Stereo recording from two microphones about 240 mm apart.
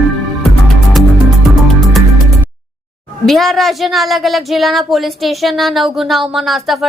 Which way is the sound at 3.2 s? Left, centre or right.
Centre.